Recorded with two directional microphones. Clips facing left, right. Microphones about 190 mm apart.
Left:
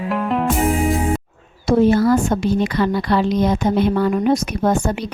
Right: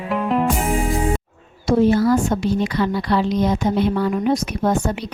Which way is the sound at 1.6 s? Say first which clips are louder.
Left 1 dB; 55° left (ahead or behind).